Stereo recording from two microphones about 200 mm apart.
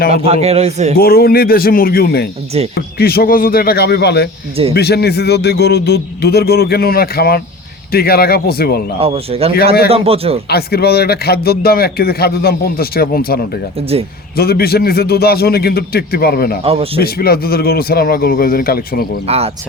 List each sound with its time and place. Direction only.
0.1 s a man's voice: 30° right (ahead or behind)
0.9 s a man's voice: 50° left (ahead or behind)
9.0 s a man's voice: 30° right (ahead or behind)
10.5 s a man's voice: 50° left (ahead or behind)
16.6 s a man's voice: 30° right (ahead or behind)
17.0 s a man's voice: 50° left (ahead or behind)
19.3 s a man's voice: 30° right (ahead or behind)